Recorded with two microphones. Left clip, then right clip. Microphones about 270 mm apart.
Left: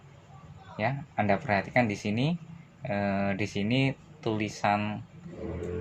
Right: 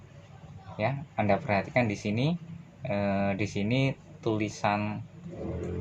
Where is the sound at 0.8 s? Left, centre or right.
Left.